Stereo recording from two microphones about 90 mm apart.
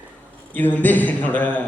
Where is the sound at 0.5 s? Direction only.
20° left (ahead or behind).